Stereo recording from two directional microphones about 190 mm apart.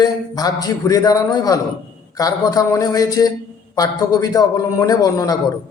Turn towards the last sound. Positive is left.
turn(degrees=20)  # may be behind; listen again after turning